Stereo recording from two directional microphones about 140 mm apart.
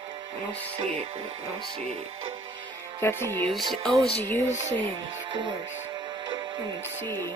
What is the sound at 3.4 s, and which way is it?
Speech, centre (ahead or behind).